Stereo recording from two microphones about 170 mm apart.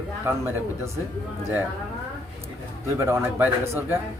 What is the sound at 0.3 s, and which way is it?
Speech, 15° right (ahead or behind).